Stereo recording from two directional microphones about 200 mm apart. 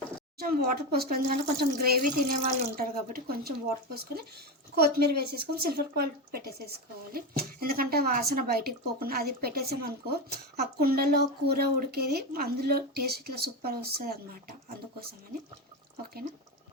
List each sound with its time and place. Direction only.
0.3 s a woman's voice: 50° right (ahead or behind)
4.8 s a woman's voice: 50° right (ahead or behind)